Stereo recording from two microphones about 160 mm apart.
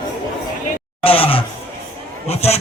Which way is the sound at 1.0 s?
35° left (ahead or behind).